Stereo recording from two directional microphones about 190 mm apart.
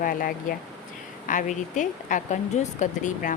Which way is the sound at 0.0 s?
50° left (ahead or behind).